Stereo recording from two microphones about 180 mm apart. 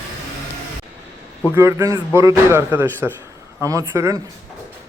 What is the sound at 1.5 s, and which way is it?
A man's voice, 15° right (ahead or behind).